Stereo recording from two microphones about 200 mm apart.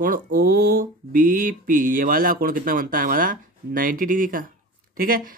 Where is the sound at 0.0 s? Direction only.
45° right (ahead or behind).